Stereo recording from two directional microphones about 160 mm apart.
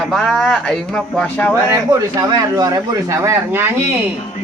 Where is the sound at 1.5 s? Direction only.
20° right (ahead or behind).